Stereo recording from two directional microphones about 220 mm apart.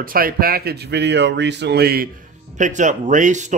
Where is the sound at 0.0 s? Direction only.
40° right (ahead or behind).